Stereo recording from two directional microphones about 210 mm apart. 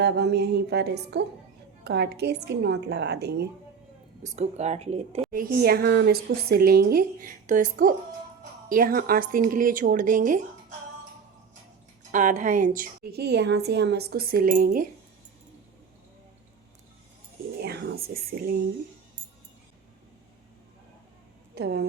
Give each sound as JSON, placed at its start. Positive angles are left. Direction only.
{"t": 0.0, "sound": "a woman's voice", "side_deg": -55}
{"t": 4.4, "sound": "speech", "side_deg": -30}
{"t": 5.3, "sound": "a woman's voice", "side_deg": -40}
{"t": 12.1, "sound": "a woman's voice", "side_deg": -35}
{"t": 17.6, "sound": "a sound", "side_deg": -50}
{"t": 21.5, "sound": "a woman's voice", "side_deg": -50}